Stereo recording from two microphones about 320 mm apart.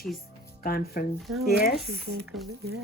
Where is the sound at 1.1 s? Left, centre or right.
Centre.